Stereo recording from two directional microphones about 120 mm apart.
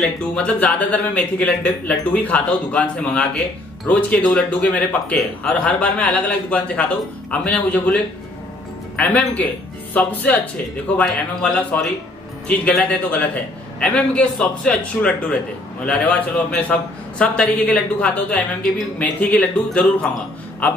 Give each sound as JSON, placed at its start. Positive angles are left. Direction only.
{"t": 0.2, "sound": "speech", "side_deg": 10}